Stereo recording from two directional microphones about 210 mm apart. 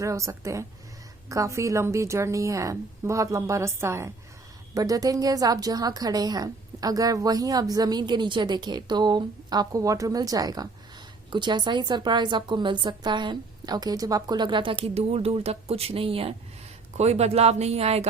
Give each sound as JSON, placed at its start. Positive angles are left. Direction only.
{"t": 0.0, "sound": "a woman's voice", "side_deg": -15}